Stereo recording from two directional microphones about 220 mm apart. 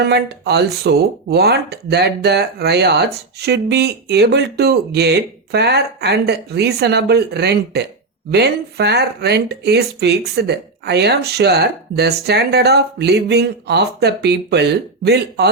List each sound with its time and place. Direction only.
0.0 s speech: 50° right (ahead or behind)